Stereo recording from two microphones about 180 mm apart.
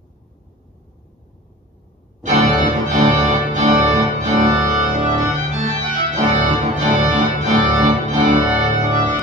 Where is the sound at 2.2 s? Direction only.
45° right (ahead or behind).